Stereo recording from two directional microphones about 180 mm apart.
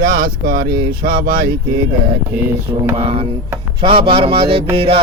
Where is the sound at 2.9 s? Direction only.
30° right (ahead or behind).